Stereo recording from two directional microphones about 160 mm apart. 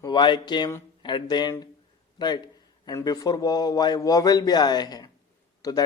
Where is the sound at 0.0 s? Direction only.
30° left (ahead or behind).